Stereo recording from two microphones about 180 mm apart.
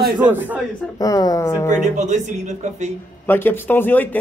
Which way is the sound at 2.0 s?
40° right (ahead or behind).